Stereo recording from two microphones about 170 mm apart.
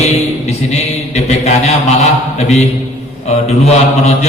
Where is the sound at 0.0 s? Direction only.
40° left (ahead or behind).